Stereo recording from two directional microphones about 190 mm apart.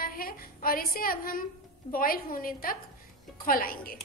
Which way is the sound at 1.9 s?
50° left (ahead or behind).